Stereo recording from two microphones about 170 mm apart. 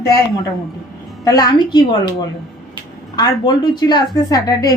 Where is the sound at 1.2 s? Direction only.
20° left (ahead or behind).